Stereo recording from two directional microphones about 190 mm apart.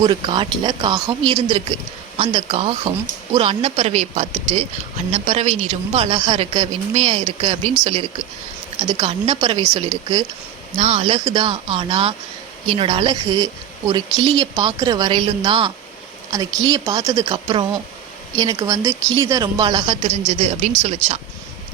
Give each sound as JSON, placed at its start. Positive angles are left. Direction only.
{"t": 0.0, "sound": "a woman's voice", "side_deg": -25}
{"t": 1.3, "sound": "a woman's voice", "side_deg": -30}
{"t": 10.8, "sound": "a woman's voice", "side_deg": -35}
{"t": 20.1, "sound": "a woman's voice", "side_deg": -35}